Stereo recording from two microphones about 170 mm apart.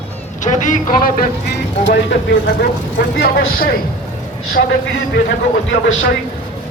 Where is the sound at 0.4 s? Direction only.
50° left (ahead or behind).